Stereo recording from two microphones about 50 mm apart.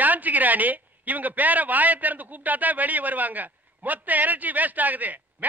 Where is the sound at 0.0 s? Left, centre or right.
Right.